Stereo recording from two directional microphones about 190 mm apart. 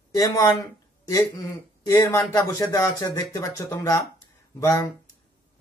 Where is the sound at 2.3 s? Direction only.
15° left (ahead or behind).